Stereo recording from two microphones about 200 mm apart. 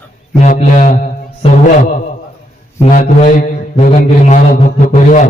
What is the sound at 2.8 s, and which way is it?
Mantra, 40° left (ahead or behind).